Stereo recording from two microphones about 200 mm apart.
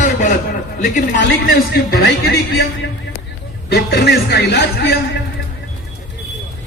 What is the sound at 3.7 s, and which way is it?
A man's voice, 55° left (ahead or behind).